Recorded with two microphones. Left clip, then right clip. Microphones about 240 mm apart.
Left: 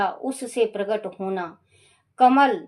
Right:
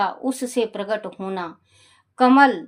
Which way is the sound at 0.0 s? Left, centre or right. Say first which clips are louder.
Right 2 dB; right.